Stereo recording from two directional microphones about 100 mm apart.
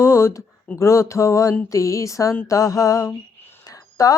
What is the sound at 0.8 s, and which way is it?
Speech, 30° left (ahead or behind).